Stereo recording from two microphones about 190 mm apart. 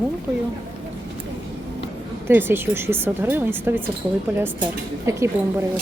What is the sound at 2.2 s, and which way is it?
Speech, 10° right (ahead or behind).